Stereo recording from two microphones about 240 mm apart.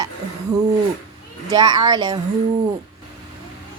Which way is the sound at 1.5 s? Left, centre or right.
Centre.